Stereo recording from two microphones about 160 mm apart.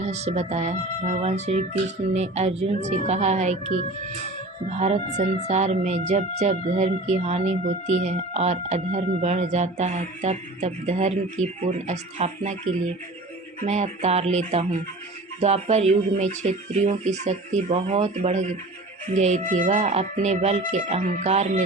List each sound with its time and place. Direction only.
0.0 s speech: 45° right (ahead or behind)